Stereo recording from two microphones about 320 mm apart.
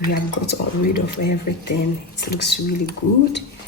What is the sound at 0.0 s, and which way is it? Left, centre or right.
Speech, left.